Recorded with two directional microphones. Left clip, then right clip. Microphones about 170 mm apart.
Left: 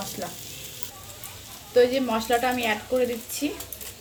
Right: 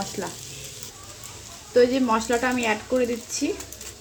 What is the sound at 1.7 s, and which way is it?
Speech, 55° right (ahead or behind).